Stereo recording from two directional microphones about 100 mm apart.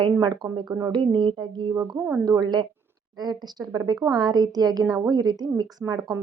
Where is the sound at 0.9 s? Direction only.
50° right (ahead or behind).